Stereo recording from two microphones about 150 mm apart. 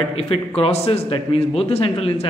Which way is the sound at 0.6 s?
40° left (ahead or behind).